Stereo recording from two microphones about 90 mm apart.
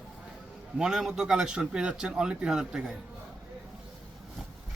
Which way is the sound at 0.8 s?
5° right (ahead or behind).